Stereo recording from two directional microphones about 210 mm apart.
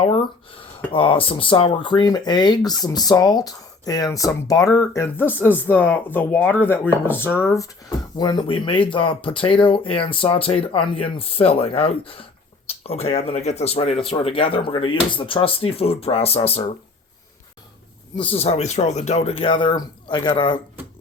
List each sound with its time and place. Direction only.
0.0 s speech: 25° left (ahead or behind)
18.2 s speech: 25° left (ahead or behind)